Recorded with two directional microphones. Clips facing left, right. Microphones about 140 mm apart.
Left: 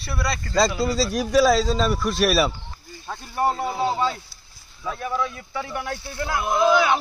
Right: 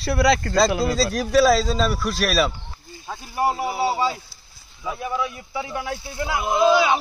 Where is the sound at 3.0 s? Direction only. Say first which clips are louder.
Even; 10° right (ahead or behind).